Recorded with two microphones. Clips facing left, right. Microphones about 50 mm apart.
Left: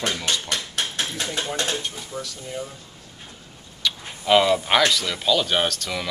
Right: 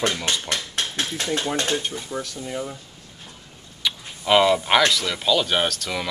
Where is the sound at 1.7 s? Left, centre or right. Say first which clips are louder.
Right 3 dB; right.